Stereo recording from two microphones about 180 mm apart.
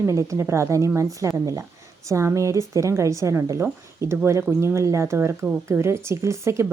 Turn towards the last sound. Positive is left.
turn(degrees=-15)  # may be behind; listen again after turning